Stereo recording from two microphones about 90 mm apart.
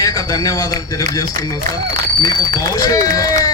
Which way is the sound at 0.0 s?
40° left (ahead or behind).